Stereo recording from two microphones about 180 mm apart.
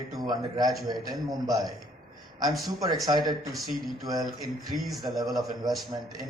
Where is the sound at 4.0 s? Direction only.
20° right (ahead or behind).